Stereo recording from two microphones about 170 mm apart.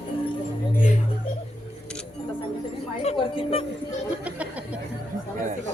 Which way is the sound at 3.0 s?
35° left (ahead or behind).